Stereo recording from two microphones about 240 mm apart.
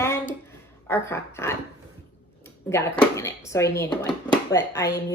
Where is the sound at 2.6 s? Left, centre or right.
Centre.